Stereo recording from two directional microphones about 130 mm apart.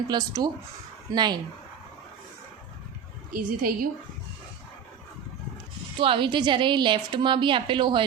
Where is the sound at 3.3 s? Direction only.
90° right.